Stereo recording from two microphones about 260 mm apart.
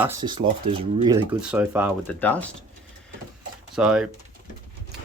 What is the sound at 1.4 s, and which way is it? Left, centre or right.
Speech, centre.